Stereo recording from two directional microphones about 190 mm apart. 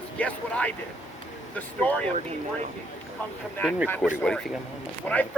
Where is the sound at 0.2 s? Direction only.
5° left (ahead or behind).